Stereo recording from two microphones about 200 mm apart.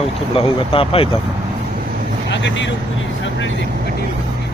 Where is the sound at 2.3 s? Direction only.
65° left (ahead or behind).